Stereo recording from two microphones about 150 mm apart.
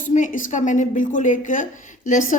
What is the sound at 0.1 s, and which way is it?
A woman's voice, 55° left (ahead or behind).